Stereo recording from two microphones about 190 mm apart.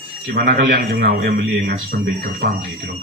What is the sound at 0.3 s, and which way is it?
A man's voice, 55° right (ahead or behind).